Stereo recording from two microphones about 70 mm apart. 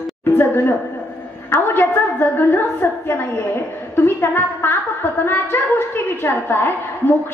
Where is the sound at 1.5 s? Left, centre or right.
Left.